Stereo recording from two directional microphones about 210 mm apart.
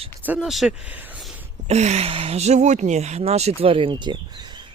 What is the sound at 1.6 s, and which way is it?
Speech, 30° right (ahead or behind).